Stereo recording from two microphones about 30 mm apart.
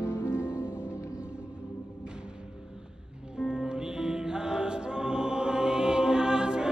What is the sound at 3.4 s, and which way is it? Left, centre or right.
Music, right.